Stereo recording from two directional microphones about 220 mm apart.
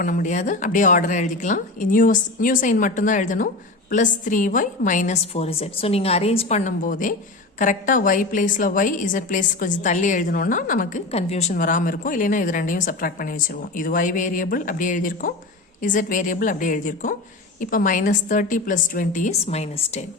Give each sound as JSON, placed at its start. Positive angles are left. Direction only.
{"t": 0.0, "sound": "a woman's voice", "side_deg": 35}